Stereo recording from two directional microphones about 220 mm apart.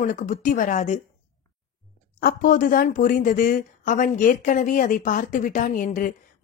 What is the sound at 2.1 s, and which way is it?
A woman's voice, 40° left (ahead or behind).